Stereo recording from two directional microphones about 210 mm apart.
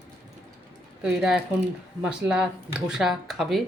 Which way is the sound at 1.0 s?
5° right (ahead or behind).